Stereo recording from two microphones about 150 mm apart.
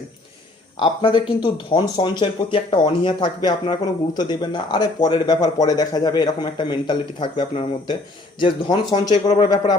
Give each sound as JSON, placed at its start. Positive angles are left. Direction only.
{"t": 0.8, "sound": "speech", "side_deg": 35}